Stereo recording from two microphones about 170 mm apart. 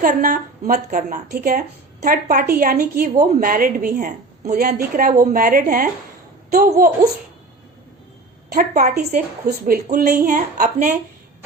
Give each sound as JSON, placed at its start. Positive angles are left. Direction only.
{"t": 0.0, "sound": "a woman's voice", "side_deg": -55}
{"t": 8.4, "sound": "a woman's voice", "side_deg": -55}
{"t": 9.5, "sound": "a woman's voice", "side_deg": -60}